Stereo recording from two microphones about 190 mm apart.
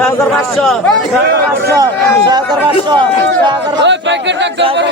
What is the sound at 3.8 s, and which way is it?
Speech, 70° right (ahead or behind).